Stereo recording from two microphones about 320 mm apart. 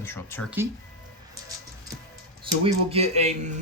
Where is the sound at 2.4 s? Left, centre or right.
Centre.